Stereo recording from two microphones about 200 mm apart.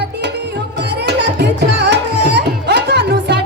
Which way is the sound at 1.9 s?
55° right (ahead or behind).